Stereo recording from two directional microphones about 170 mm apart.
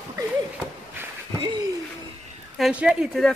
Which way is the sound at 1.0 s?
15° right (ahead or behind).